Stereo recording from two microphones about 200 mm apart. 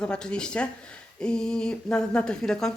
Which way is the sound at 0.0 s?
5° left (ahead or behind).